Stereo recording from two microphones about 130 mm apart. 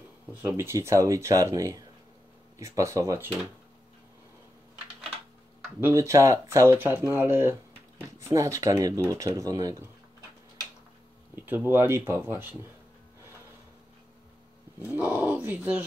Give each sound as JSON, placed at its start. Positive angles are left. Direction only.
{"t": 0.4, "sound": "speech", "side_deg": -15}
{"t": 5.8, "sound": "speech", "side_deg": -20}
{"t": 11.3, "sound": "speech", "side_deg": -15}
{"t": 14.8, "sound": "speech", "side_deg": -15}